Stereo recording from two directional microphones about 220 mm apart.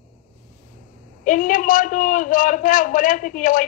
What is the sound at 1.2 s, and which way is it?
A man's voice, 35° left (ahead or behind).